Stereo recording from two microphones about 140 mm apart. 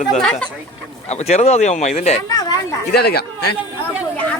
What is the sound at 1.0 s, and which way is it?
Speech, 50° left (ahead or behind).